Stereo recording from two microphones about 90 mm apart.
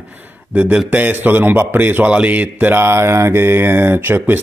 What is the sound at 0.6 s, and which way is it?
Speech, 15° right (ahead or behind).